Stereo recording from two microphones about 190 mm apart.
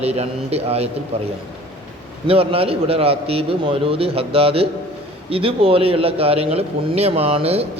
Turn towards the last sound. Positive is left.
turn(degrees=-30)  # may be behind; listen again after turning